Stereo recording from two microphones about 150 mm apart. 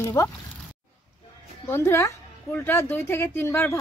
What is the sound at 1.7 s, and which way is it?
Speech, 15° left (ahead or behind).